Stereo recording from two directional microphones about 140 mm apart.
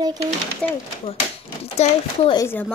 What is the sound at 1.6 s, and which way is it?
Speech, 45° left (ahead or behind).